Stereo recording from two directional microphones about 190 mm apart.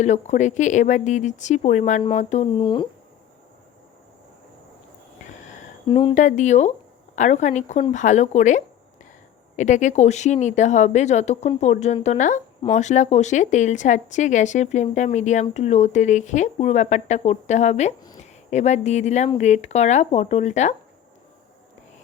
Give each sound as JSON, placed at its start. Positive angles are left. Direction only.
{"t": 0.0, "sound": "speech", "side_deg": 40}
{"t": 5.9, "sound": "speech", "side_deg": 30}
{"t": 6.2, "sound": "speech", "side_deg": 40}